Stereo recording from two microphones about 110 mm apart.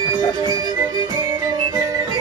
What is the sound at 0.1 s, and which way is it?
Music, 40° right (ahead or behind).